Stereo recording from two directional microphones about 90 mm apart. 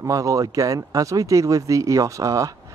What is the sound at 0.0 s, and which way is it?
Speech, 40° right (ahead or behind).